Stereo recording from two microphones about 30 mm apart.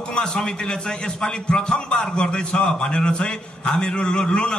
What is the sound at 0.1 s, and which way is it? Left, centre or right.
A man's voice, left.